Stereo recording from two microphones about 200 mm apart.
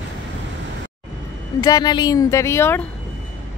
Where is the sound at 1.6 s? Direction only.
20° left (ahead or behind).